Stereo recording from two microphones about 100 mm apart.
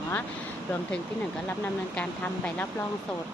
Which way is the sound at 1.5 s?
15° left (ahead or behind).